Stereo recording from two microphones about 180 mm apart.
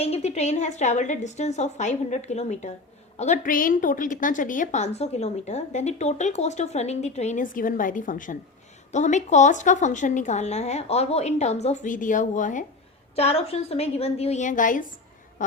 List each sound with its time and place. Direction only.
0.0 s a woman's voice: 35° left (ahead or behind)
13.1 s a woman's voice: 35° left (ahead or behind)